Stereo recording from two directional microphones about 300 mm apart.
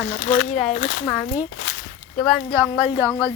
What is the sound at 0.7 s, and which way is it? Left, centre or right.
Speech, left.